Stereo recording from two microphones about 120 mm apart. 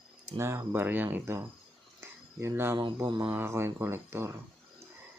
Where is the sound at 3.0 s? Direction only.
40° right (ahead or behind).